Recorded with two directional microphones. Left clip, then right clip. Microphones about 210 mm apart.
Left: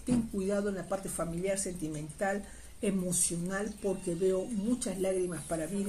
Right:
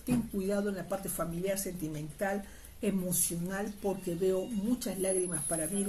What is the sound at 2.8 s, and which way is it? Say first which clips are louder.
Speech: left 1 dB; 5° left (ahead or behind).